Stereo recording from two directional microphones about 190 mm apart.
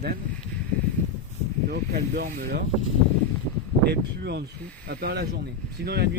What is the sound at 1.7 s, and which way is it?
Speech, 55° right (ahead or behind).